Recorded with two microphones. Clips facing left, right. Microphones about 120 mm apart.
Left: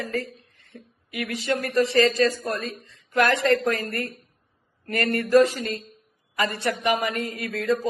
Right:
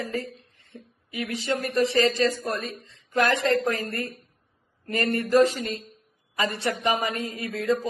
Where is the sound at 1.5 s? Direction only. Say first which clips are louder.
Left 2 dB; 20° right (ahead or behind).